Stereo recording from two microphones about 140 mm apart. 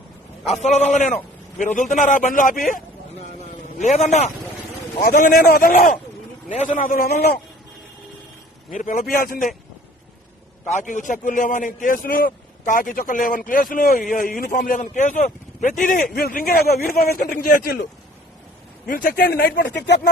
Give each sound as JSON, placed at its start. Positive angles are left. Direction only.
{"t": 0.5, "sound": "a man's voice", "side_deg": 55}
{"t": 3.8, "sound": "a man's voice", "side_deg": 55}
{"t": 5.0, "sound": "a man's voice", "side_deg": 80}
{"t": 8.7, "sound": "a man's voice", "side_deg": 65}
{"t": 10.7, "sound": "a man's voice", "side_deg": 60}
{"t": 16.1, "sound": "a man's voice", "side_deg": 90}
{"t": 18.9, "sound": "a man's voice", "side_deg": 80}